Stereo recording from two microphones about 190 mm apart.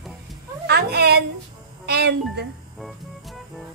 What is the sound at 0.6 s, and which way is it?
Cat, 60° right (ahead or behind).